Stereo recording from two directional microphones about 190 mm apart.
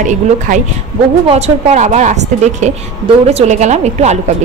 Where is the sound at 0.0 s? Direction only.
40° right (ahead or behind).